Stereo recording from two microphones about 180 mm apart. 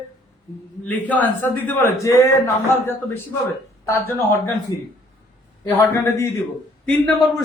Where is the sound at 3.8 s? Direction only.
15° left (ahead or behind).